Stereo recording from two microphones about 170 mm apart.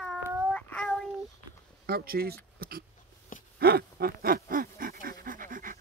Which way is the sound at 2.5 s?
60° right (ahead or behind).